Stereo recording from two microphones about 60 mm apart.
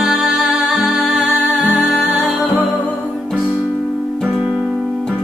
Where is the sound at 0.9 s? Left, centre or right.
Centre.